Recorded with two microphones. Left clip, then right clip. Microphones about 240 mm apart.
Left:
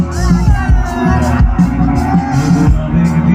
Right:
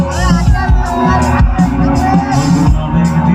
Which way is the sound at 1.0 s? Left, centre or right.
Right.